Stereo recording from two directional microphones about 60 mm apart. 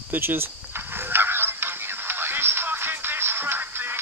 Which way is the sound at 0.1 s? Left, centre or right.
Right.